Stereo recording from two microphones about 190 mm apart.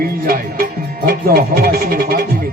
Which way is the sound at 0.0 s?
50° right (ahead or behind).